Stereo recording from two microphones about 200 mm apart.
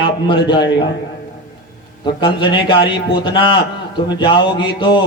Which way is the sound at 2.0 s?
25° left (ahead or behind).